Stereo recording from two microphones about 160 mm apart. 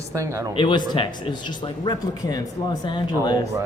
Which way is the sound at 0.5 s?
30° left (ahead or behind).